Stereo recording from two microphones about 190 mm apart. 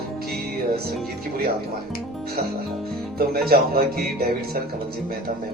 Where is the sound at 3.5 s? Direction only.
55° right (ahead or behind).